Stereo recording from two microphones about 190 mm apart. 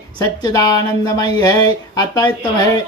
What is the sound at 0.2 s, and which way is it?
Speech, 20° left (ahead or behind).